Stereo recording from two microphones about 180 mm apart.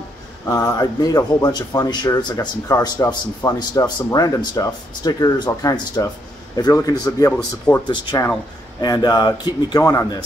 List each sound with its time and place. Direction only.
0.5 s speech: 20° left (ahead or behind)
7.3 s speech: 5° left (ahead or behind)
7.9 s speech: 25° left (ahead or behind)